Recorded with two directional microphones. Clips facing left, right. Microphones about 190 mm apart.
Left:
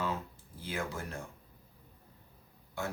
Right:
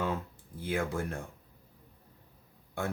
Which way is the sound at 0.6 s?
55° right (ahead or behind).